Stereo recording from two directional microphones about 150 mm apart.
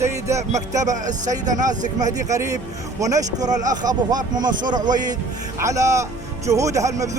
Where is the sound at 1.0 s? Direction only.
55° right (ahead or behind).